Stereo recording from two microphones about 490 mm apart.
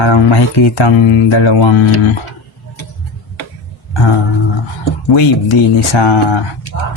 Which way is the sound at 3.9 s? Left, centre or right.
Left.